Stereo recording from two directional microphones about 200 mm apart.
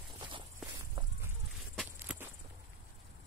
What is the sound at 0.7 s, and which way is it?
Walk, 15° right (ahead or behind).